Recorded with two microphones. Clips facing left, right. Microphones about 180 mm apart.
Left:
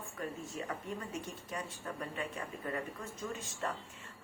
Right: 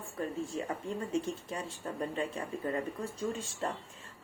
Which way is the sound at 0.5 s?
30° right (ahead or behind).